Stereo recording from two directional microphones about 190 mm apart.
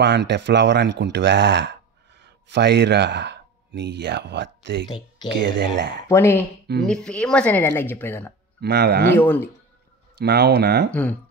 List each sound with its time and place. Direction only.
0.0 s speech: 65° right (ahead or behind)
4.8 s speech: 25° left (ahead or behind)
5.3 s speech: 65° right (ahead or behind)
6.0 s speech: 15° left (ahead or behind)
8.5 s speech: 60° right (ahead or behind)
9.1 s speech: 10° left (ahead or behind)
10.1 s speech: 60° right (ahead or behind)
10.9 s speech: 10° left (ahead or behind)